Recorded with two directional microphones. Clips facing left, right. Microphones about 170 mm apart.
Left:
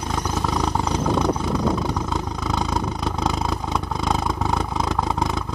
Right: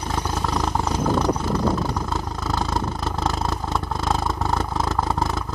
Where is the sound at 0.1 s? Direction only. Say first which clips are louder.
Left 1 dB; centre (ahead or behind).